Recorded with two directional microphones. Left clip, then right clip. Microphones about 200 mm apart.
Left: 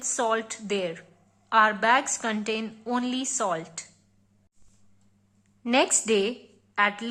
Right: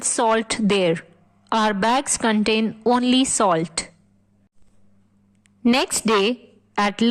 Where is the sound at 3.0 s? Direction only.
45° right (ahead or behind).